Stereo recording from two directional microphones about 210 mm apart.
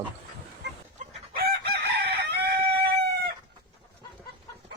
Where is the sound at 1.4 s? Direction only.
45° right (ahead or behind).